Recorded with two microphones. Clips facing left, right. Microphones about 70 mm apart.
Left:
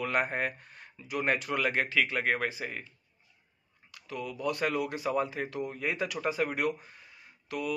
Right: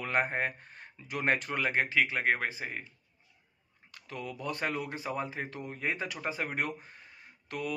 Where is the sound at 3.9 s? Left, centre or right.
Right.